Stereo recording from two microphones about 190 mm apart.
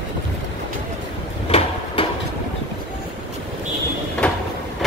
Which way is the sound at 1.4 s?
30° left (ahead or behind).